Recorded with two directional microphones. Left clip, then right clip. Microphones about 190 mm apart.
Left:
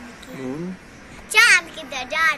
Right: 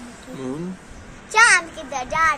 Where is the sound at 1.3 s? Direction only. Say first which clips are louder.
Even; 25° right (ahead or behind).